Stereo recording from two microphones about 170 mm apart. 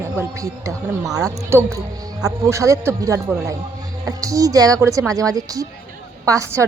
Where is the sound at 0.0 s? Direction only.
15° right (ahead or behind).